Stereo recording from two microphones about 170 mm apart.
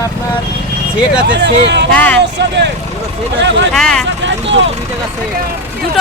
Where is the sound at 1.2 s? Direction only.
90° right.